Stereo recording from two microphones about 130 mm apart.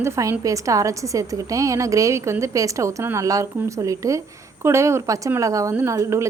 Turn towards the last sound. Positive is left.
turn(degrees=-20)  # may be behind; listen again after turning